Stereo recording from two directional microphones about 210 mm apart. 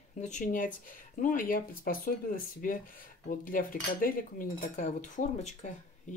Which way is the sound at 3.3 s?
40° left (ahead or behind).